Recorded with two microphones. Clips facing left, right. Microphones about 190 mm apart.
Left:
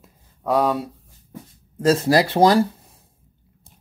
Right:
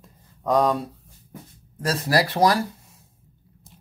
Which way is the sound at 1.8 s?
25° left (ahead or behind).